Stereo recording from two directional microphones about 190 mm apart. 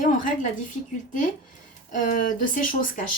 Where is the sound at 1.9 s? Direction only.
40° left (ahead or behind).